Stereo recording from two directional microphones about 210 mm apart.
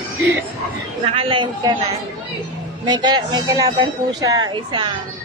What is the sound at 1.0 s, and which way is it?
Speech, 25° right (ahead or behind).